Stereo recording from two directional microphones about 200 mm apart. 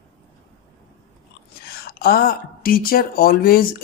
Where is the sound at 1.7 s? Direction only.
50° left (ahead or behind).